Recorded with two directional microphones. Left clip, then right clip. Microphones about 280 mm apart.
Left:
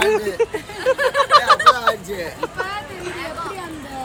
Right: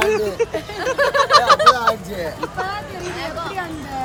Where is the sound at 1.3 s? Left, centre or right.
Centre.